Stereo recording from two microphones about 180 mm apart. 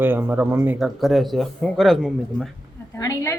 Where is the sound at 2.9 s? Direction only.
15° left (ahead or behind).